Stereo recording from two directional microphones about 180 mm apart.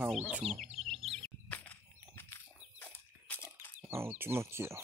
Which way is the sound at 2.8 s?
10° left (ahead or behind).